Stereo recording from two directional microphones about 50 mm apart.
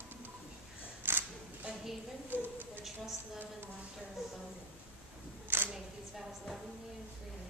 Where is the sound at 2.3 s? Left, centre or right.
Right.